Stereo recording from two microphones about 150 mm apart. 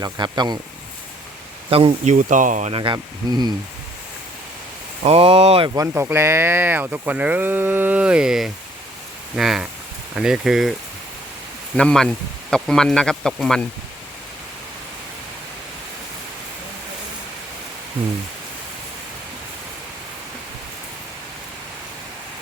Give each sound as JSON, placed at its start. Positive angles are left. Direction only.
{"t": 0.0, "sound": "speech", "side_deg": -30}
{"t": 1.7, "sound": "speech", "side_deg": -40}
{"t": 2.0, "sound": "speech", "side_deg": -55}
{"t": 2.7, "sound": "speech", "side_deg": -30}
{"t": 5.0, "sound": "speech", "side_deg": -40}
{"t": 5.7, "sound": "speech", "side_deg": -15}
{"t": 11.8, "sound": "speech", "side_deg": 5}